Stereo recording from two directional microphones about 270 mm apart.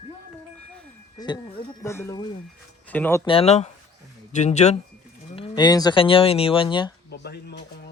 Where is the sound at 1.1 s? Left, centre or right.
Centre.